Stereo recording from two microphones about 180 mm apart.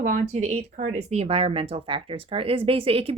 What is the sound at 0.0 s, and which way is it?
Speech, 40° right (ahead or behind).